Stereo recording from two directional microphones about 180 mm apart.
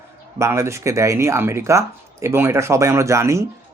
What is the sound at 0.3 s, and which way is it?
Speech, 15° right (ahead or behind).